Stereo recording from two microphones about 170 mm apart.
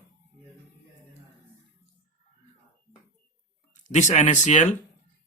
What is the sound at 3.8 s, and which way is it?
Speech, 45° left (ahead or behind).